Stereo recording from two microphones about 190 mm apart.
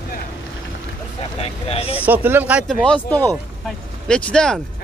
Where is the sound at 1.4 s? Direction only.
30° left (ahead or behind).